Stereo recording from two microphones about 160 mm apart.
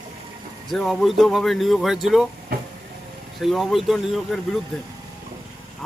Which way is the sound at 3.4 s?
Centre (ahead or behind).